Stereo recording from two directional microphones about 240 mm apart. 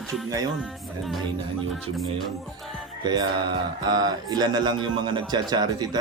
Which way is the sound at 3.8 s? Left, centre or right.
Centre.